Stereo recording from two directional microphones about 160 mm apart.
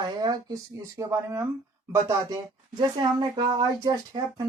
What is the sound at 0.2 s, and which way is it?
Speech, 25° right (ahead or behind).